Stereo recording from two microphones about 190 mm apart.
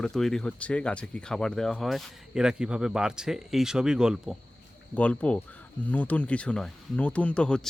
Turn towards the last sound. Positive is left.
turn(degrees=5)  # may be behind; listen again after turning